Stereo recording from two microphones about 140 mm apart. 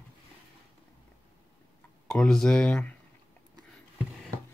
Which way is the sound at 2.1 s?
5° left (ahead or behind).